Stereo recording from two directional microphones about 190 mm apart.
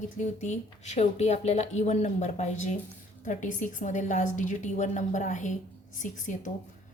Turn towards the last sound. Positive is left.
turn(degrees=40)  # may be behind; listen again after turning